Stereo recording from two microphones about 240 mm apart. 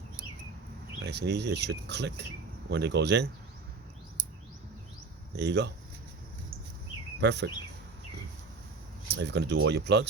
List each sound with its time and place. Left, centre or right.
1.0 s speech: right
5.3 s speech: right
7.2 s speech: right
9.0 s speech: right